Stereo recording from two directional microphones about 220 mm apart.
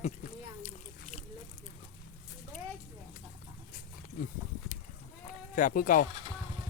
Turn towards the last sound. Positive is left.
turn(degrees=40)  # may be behind; listen again after turning